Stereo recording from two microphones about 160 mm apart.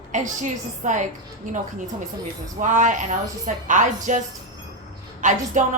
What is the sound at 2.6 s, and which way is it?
A woman's voice, 55° right (ahead or behind).